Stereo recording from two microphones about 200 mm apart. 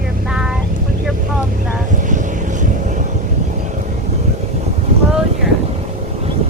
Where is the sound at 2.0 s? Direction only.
40° right (ahead or behind).